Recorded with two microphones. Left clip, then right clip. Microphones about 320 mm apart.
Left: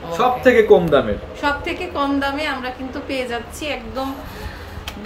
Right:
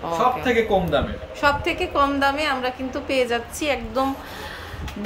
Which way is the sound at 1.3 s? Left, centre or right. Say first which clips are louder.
Right 3 dB; centre.